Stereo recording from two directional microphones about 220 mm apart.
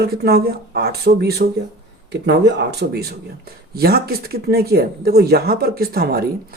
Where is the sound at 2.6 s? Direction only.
45° right (ahead or behind).